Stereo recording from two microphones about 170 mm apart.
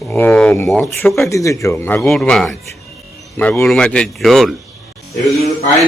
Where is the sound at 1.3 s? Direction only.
20° left (ahead or behind).